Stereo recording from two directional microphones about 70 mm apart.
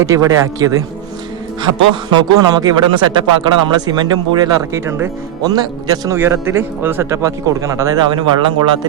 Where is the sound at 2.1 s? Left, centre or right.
Right.